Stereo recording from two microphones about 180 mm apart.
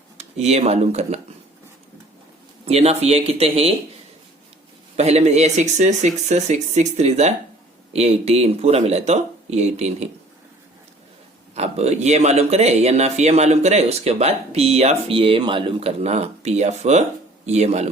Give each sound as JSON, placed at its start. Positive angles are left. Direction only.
{"t": 0.2, "sound": "speech", "side_deg": -35}
{"t": 2.6, "sound": "speech", "side_deg": -35}
{"t": 4.9, "sound": "speech", "side_deg": -35}
{"t": 11.5, "sound": "speech", "side_deg": -35}